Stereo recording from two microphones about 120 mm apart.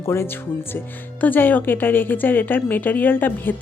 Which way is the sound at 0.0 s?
20° left (ahead or behind).